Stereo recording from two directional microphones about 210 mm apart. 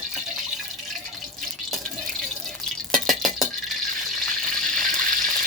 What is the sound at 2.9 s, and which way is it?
Stir, centre (ahead or behind).